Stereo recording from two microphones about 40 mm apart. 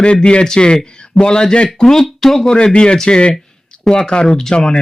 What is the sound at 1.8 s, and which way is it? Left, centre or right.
Speech, centre.